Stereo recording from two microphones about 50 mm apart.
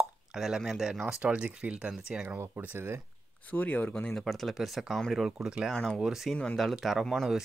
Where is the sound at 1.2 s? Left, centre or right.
Right.